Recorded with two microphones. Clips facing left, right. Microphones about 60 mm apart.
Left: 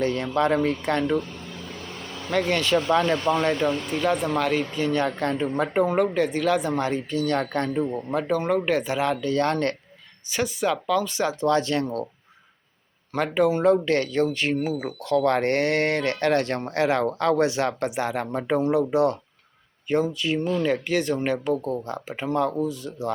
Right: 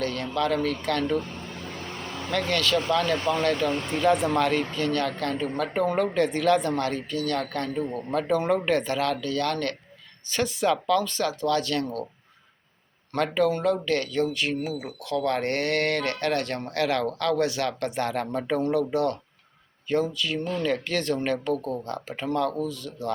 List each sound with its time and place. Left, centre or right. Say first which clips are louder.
0.0 s speech: left 4 dB; left
2.3 s speech: left 3 dB; left
3.9 s speech: right 5 dB; centre
4.8 s speech: left 2 dB; centre
8.3 s speech: even; centre; by 9.7 s left
10.3 s speech: even; centre; by 11.9 s left
13.1 s speech: left 2 dB; centre